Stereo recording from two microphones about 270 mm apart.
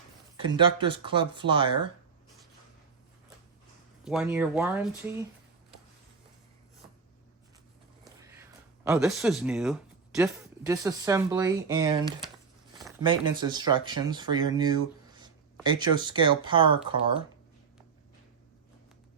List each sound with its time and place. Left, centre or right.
0.3 s speech: centre
4.0 s speech: centre
8.2 s a sound: centre
10.6 s speech: centre